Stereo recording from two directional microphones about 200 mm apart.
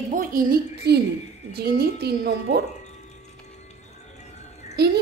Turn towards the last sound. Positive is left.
turn(degrees=-55)  # may be behind; listen again after turning